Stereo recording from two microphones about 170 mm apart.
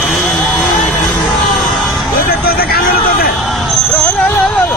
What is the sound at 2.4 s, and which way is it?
Vehicle, 65° left (ahead or behind).